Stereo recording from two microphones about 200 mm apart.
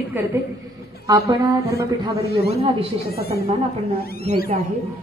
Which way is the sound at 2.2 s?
55° left (ahead or behind).